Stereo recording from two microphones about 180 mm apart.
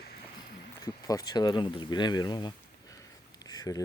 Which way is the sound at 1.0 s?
20° left (ahead or behind).